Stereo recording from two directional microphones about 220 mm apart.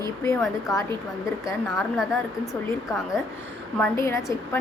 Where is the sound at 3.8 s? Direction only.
10° left (ahead or behind).